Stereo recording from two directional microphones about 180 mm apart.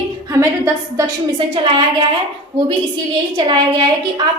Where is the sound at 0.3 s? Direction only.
15° right (ahead or behind).